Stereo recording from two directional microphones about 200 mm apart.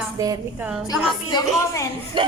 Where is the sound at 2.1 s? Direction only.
25° right (ahead or behind).